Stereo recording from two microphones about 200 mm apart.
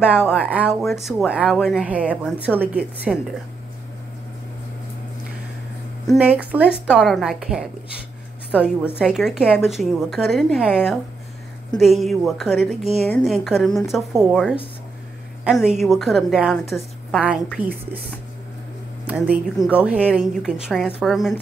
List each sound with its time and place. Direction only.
0.3 s a woman's voice: 5° right (ahead or behind)
6.0 s a woman's voice: 5° right (ahead or behind)
8.9 s a woman's voice: centre (ahead or behind)
11.8 s a woman's voice: centre (ahead or behind)
17.6 s speech: 10° right (ahead or behind)
19.0 s a woman's voice: 5° right (ahead or behind)